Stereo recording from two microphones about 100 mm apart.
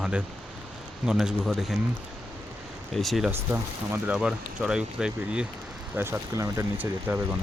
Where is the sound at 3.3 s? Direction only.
20° right (ahead or behind).